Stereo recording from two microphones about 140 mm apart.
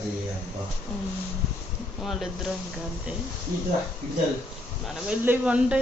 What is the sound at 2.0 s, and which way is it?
Speech, centre (ahead or behind).